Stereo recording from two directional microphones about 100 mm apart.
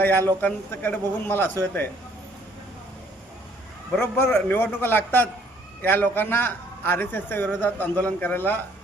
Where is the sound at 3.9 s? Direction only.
20° left (ahead or behind).